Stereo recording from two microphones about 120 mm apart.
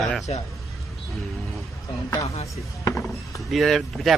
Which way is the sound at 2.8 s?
25° left (ahead or behind).